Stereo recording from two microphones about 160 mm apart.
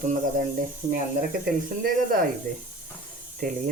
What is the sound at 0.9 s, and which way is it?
Speech, 70° right (ahead or behind).